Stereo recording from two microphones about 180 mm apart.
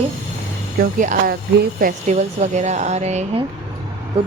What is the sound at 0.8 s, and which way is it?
A woman's voice, 50° right (ahead or behind).